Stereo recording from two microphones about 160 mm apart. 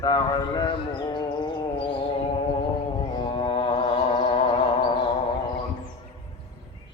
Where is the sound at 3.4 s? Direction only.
30° left (ahead or behind).